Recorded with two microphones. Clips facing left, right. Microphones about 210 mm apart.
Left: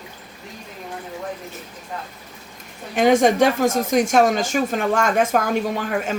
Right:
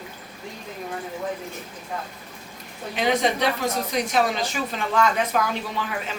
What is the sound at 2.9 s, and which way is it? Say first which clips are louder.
Speech: left 7 dB; 45° left (ahead or behind).